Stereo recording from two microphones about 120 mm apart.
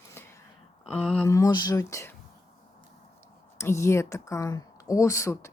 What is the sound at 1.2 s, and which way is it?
Speech, 25° left (ahead or behind).